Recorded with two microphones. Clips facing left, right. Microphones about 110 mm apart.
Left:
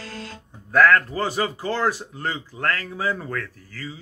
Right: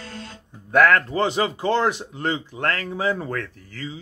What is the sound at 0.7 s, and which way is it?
Speech, 20° right (ahead or behind).